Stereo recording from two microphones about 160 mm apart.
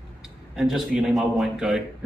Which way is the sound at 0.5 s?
5° right (ahead or behind).